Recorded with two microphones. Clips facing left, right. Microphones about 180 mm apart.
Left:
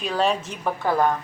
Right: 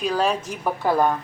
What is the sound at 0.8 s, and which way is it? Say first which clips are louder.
Cutlery: right 2 dB; 15° right (ahead or behind).